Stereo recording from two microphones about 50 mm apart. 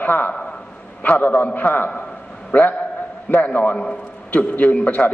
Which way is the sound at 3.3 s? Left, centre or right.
Left.